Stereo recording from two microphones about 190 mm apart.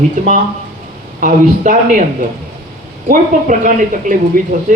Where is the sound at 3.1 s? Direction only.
45° right (ahead or behind).